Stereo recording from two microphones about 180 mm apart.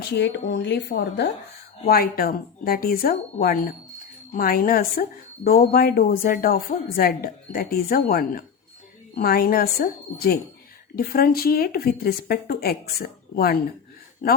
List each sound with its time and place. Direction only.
0.0 s speech: 70° left (ahead or behind)
1.9 s speech: 60° left (ahead or behind)